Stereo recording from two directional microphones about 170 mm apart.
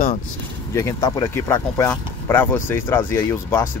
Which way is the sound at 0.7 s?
20° left (ahead or behind).